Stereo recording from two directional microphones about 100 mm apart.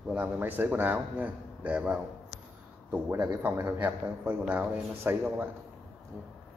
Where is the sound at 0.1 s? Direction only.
20° right (ahead or behind).